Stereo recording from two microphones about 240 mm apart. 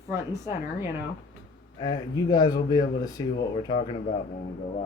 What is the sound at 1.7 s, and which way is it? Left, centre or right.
Speech, centre.